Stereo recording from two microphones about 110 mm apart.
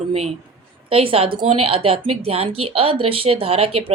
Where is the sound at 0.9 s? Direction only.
60° right (ahead or behind).